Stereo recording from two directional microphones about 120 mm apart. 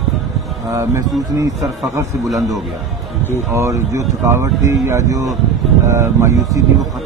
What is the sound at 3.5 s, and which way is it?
Speech, 25° right (ahead or behind).